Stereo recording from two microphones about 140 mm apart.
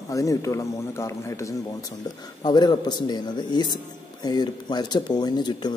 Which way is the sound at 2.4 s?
30° left (ahead or behind).